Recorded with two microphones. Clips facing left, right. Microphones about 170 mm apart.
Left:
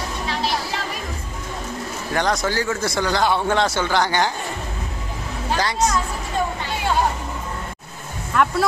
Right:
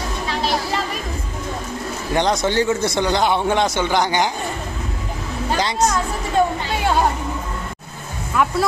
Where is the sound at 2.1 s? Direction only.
20° right (ahead or behind).